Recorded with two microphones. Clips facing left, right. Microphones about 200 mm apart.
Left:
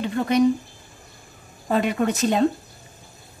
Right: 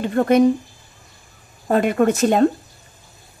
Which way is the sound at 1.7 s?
50° right (ahead or behind).